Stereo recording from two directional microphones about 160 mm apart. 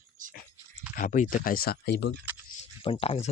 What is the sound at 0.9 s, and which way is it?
Speech, 55° left (ahead or behind).